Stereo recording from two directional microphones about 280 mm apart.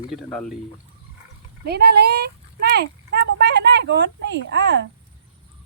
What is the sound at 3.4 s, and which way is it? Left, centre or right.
Speech, right.